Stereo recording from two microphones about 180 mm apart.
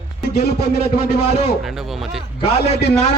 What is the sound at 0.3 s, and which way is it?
Speech, 65° left (ahead or behind).